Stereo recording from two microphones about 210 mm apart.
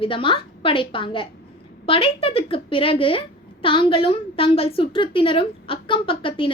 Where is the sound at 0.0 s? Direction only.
25° left (ahead or behind).